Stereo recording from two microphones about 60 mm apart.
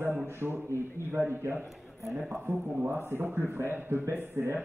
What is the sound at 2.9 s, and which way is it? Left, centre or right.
Speech, right.